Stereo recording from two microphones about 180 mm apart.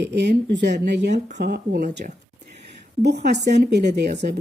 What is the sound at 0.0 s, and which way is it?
Speech, 70° right (ahead or behind).